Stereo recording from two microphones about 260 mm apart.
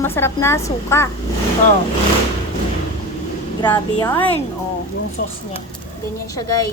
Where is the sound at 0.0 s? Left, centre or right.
Centre.